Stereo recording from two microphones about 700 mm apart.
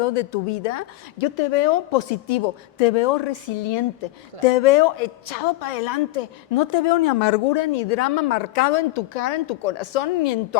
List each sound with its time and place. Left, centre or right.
0.0 s a woman's voice: left
5.5 s a woman's voice: left